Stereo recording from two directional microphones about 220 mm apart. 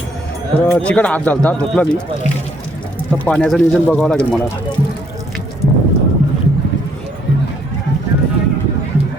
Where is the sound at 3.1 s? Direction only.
5° left (ahead or behind).